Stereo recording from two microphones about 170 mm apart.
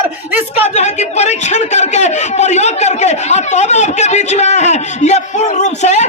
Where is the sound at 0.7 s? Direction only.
40° left (ahead or behind).